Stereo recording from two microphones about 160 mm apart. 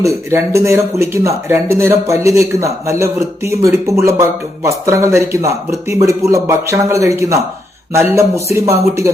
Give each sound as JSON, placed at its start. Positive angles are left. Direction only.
{"t": 0.0, "sound": "speech", "side_deg": -20}